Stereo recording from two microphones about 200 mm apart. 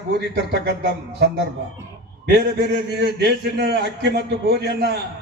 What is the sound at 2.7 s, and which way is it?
A man's voice, 55° right (ahead or behind).